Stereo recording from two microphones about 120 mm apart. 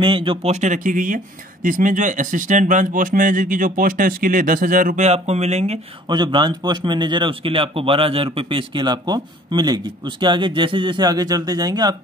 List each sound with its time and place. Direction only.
0.0 s speech: 45° right (ahead or behind)
0.5 s speech: 85° right; by 5.8 s 65° right (ahead or behind)
6.0 s a man's voice: 40° right (ahead or behind)